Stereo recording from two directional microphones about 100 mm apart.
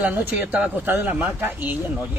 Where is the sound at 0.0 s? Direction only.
20° right (ahead or behind).